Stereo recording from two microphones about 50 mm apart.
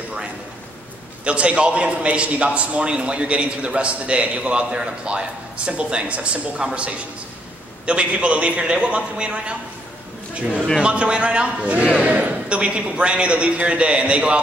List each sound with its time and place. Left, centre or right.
1.2 s a man's voice: right
10.8 s a man's voice: right